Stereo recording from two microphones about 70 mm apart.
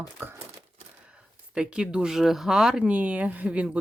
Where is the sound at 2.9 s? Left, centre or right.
Right.